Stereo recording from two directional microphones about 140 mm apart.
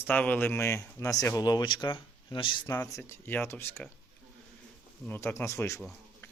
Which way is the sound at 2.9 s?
20° left (ahead or behind).